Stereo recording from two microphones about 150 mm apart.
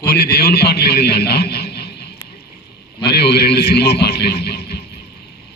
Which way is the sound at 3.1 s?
90° left.